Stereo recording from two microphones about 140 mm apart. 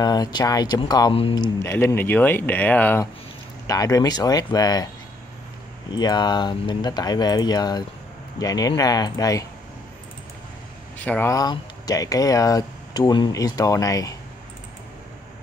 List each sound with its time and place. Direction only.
0.0 s speech: 30° left (ahead or behind)
1.6 s speech: 20° left (ahead or behind)
3.6 s speech: 25° left (ahead or behind)
5.9 s speech: 30° left (ahead or behind)
11.0 s speech: 10° left (ahead or behind)
11.3 s speech: 30° left (ahead or behind)